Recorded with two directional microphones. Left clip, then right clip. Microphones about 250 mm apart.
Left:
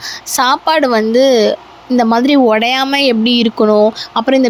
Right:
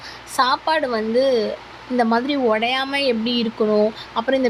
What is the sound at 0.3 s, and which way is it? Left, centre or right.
Speech, left.